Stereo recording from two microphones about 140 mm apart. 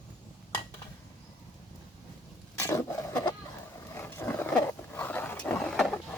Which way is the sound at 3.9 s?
15° left (ahead or behind).